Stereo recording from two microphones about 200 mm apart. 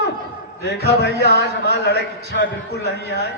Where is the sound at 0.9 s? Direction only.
55° left (ahead or behind).